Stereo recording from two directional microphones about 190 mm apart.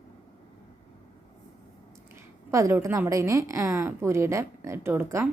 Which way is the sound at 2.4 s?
15° right (ahead or behind).